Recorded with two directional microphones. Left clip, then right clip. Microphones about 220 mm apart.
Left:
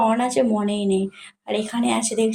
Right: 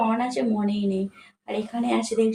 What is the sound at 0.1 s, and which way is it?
A woman's voice, 40° left (ahead or behind).